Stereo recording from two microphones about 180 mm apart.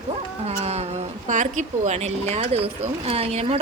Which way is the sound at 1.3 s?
45° right (ahead or behind).